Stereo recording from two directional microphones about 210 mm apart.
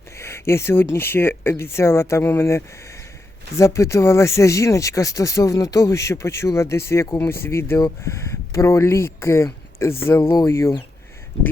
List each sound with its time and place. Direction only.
0.2 s speech: 10° left (ahead or behind)